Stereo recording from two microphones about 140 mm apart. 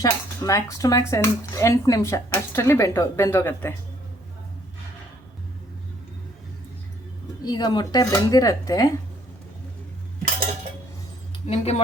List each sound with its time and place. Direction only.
0.0 s speech: 25° left (ahead or behind)
7.4 s speech: 30° left (ahead or behind)
11.4 s speech: 50° left (ahead or behind)